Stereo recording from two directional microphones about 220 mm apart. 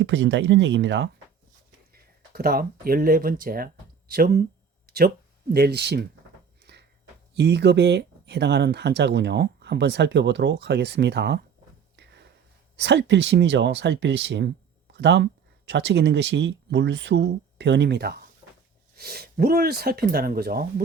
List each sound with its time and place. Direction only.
0.0 s speech: 55° right (ahead or behind)
1.9 s speech: 45° right (ahead or behind)
6.7 s a sound: 50° right (ahead or behind)
7.3 s speech: 50° right (ahead or behind)
12.7 s speech: 50° right (ahead or behind)